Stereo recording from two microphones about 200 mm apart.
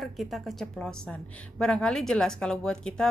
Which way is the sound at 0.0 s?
Centre (ahead or behind).